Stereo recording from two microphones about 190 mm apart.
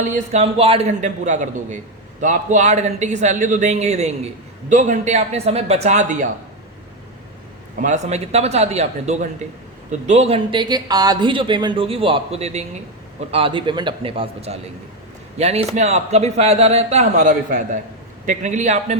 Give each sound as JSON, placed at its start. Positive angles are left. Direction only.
{"t": 0.1, "sound": "a man's voice", "side_deg": -35}
{"t": 7.8, "sound": "a man's voice", "side_deg": -40}